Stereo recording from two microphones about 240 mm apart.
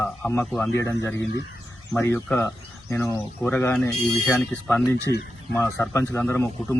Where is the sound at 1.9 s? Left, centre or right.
Centre.